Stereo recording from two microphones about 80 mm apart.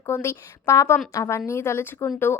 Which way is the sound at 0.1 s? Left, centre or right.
Left.